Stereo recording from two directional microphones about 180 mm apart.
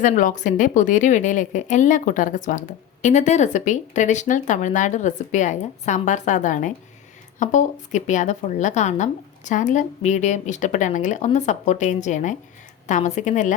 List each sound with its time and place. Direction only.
0.0 s a woman's voice: 45° left (ahead or behind)